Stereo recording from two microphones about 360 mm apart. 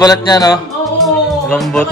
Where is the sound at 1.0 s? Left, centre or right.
Centre.